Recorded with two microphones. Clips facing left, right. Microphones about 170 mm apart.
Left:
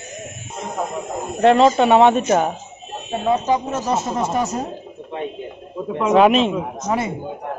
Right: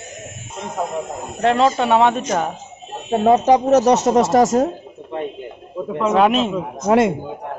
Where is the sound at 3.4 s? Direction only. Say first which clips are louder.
Right 8 dB; 75° right (ahead or behind); by 4.6 s 90° right.